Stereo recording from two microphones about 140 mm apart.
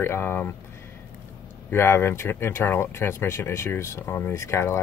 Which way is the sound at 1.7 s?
15° left (ahead or behind).